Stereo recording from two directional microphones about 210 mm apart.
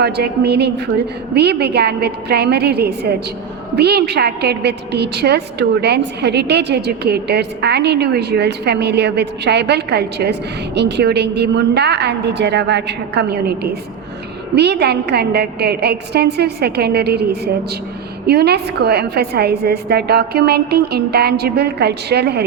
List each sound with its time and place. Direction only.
0.0 s a woman's voice: 50° right (ahead or behind)